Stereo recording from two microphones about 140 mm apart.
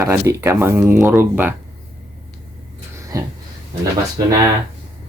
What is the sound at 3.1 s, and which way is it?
Speech, 25° right (ahead or behind).